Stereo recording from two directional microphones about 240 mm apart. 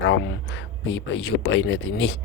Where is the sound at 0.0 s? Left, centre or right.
Left.